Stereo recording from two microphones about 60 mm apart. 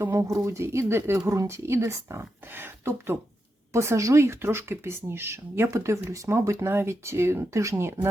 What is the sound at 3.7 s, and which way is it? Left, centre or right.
Speech, right.